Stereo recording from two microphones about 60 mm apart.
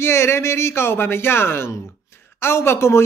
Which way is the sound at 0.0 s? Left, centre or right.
Left.